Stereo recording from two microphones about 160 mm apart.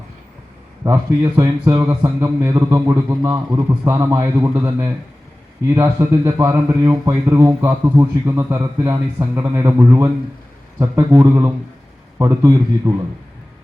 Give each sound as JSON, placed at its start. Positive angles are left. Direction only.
{"t": 0.9, "sound": "a man's voice", "side_deg": -20}